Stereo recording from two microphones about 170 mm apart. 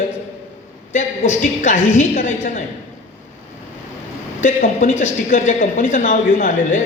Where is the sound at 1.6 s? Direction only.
45° left (ahead or behind).